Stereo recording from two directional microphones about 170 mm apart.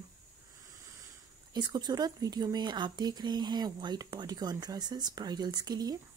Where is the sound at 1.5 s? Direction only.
25° right (ahead or behind).